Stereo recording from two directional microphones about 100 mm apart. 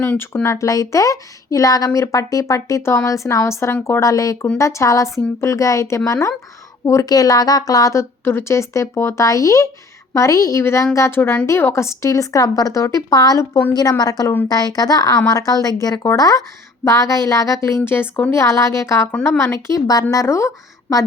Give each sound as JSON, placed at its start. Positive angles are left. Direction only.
{"t": 0.1, "sound": "speech", "side_deg": 15}
{"t": 0.4, "sound": "a woman's voice", "side_deg": 30}